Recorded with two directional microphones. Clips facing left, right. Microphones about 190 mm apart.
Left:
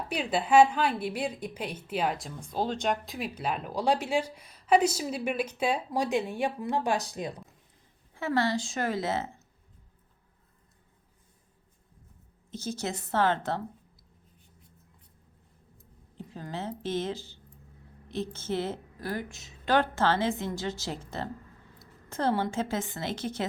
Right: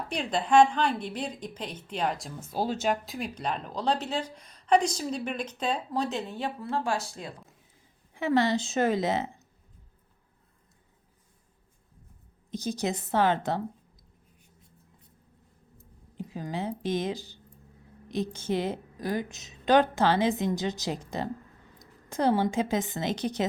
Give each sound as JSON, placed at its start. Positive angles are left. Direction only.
{"t": 0.1, "sound": "a woman's voice", "side_deg": 5}
{"t": 8.1, "sound": "a woman's voice", "side_deg": -15}
{"t": 12.5, "sound": "a woman's voice", "side_deg": -15}
{"t": 16.1, "sound": "a woman's voice", "side_deg": -10}